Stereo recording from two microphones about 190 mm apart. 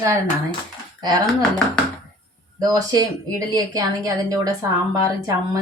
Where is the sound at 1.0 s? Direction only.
20° right (ahead or behind).